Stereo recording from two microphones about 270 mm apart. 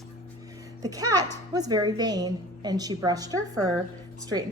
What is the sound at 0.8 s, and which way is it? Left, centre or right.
A woman's voice, centre.